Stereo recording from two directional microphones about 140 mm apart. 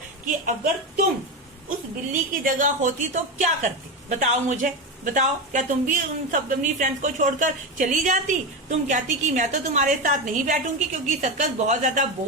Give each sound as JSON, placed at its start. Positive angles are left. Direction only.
{"t": 0.3, "sound": "a woman's voice", "side_deg": -80}
{"t": 2.4, "sound": "a woman's voice", "side_deg": -70}